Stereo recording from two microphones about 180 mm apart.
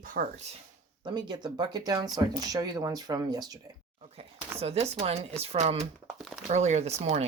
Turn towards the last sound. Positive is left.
turn(degrees=-35)  # may be behind; listen again after turning